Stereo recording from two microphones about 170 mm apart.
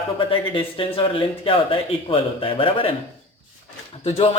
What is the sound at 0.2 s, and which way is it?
A man's voice, 30° left (ahead or behind).